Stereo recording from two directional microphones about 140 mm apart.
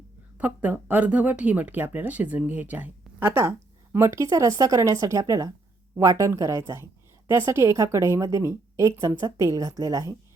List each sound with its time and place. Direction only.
0.3 s a woman's voice: 10° right (ahead or behind)